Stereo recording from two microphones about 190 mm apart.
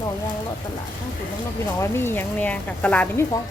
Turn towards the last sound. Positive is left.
turn(degrees=10)  # may be behind; listen again after turning